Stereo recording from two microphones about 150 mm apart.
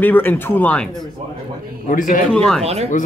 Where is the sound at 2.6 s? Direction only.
45° right (ahead or behind).